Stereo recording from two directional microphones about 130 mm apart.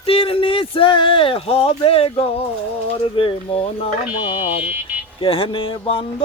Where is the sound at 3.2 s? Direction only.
45° left (ahead or behind).